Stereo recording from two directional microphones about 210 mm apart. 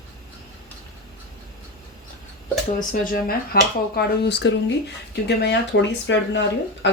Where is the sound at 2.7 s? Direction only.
40° left (ahead or behind).